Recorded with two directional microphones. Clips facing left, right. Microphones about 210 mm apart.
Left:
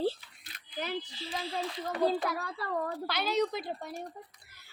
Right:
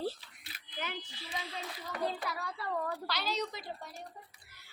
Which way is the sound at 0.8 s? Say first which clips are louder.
Left 6 dB; 35° left (ahead or behind).